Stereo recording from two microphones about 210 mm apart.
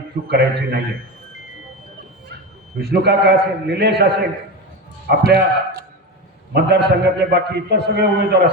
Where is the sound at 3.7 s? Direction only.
50° right (ahead or behind).